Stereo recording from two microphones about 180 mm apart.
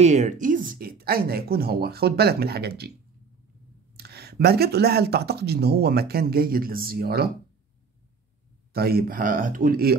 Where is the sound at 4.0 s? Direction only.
65° right (ahead or behind).